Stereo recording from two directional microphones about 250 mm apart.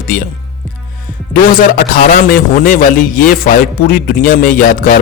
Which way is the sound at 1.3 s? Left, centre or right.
Left.